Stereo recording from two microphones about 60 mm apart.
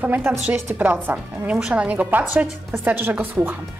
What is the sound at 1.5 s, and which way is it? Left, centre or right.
A woman's voice, centre.